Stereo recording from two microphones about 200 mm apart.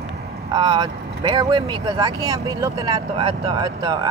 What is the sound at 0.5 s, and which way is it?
Speech, 20° right (ahead or behind).